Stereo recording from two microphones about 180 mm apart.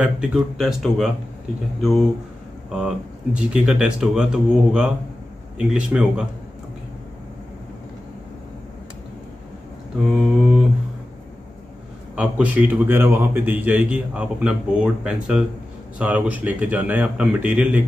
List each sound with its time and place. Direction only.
0.0 s speech: 5° right (ahead or behind)
3.3 s speech: 5° right (ahead or behind)
10.2 s speech: centre (ahead or behind)
12.2 s a man's voice: 10° right (ahead or behind)